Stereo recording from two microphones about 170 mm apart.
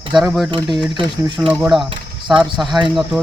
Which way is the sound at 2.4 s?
Centre (ahead or behind).